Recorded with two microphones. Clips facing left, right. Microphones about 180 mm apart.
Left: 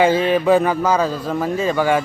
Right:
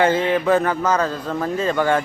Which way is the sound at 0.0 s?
10° left (ahead or behind).